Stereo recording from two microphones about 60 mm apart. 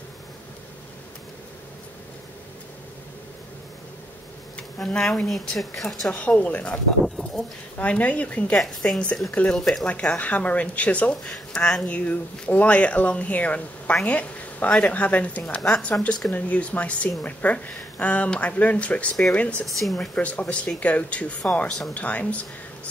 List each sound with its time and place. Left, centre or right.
4.6 s a sound: centre
5.2 s a woman's voice: centre
6.0 s speech: left
7.8 s speech: left
8.5 s speech: centre
10.1 s speech: left
11.2 s speech: centre
11.9 s a woman's voice: left
19.6 s a woman's voice: centre
20.2 s speech: left
21.6 s a woman's voice: centre
21.9 s speech: left